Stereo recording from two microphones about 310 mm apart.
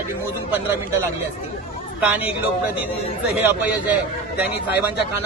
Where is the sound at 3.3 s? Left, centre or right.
Centre.